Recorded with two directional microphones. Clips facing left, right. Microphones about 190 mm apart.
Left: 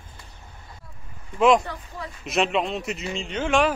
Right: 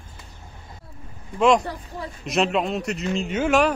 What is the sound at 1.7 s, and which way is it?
Speech, 35° right (ahead or behind).